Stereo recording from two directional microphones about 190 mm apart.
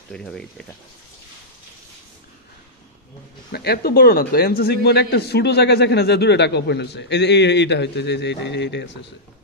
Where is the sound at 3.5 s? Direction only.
55° left (ahead or behind).